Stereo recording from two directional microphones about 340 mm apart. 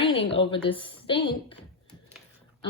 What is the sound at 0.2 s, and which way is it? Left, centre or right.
A woman's voice, centre.